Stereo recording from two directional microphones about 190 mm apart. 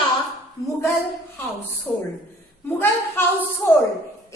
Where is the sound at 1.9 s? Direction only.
5° left (ahead or behind).